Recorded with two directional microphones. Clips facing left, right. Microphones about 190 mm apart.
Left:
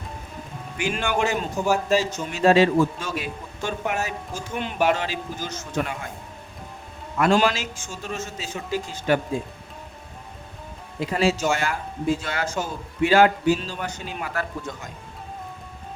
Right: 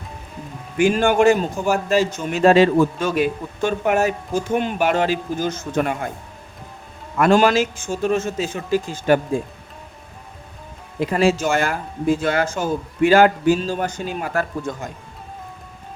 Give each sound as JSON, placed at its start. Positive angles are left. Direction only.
{"t": 0.8, "sound": "a man's voice", "side_deg": -50}
{"t": 7.2, "sound": "a man's voice", "side_deg": -50}
{"t": 11.0, "sound": "a man's voice", "side_deg": -50}